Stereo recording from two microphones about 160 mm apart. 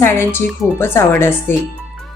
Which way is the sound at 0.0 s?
15° left (ahead or behind).